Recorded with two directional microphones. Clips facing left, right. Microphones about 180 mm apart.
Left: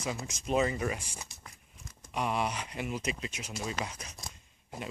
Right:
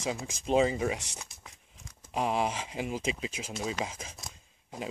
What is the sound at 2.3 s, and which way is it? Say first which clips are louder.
Speech: right 3 dB; 90° right.